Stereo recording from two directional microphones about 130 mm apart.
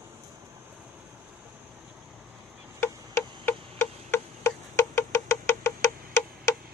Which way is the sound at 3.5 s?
20° left (ahead or behind).